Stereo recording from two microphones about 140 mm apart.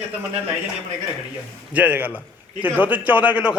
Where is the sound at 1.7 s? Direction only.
10° right (ahead or behind).